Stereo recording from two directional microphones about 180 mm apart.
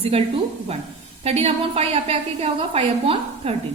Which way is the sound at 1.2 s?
35° right (ahead or behind).